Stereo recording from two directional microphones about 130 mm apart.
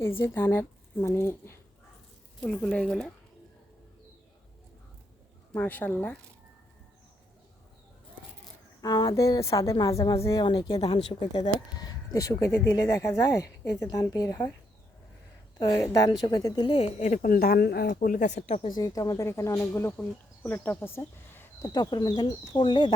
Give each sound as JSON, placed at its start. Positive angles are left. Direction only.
{"t": 0.0, "sound": "speech", "side_deg": 15}
{"t": 2.5, "sound": "speech", "side_deg": 10}
{"t": 5.5, "sound": "speech", "side_deg": 15}
{"t": 8.8, "sound": "speech", "side_deg": 30}
{"t": 15.5, "sound": "a woman's voice", "side_deg": 30}
{"t": 16.6, "sound": "a woman's voice", "side_deg": 50}
{"t": 18.8, "sound": "speech", "side_deg": 30}
{"t": 21.7, "sound": "speech", "side_deg": 30}